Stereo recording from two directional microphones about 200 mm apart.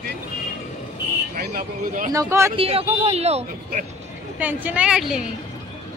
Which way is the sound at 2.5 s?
30° right (ahead or behind).